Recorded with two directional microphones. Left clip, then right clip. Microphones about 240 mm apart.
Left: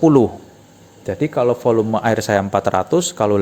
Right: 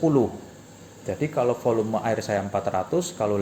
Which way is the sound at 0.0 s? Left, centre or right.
Left.